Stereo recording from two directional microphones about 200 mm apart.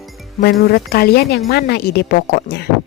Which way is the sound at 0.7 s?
50° left (ahead or behind).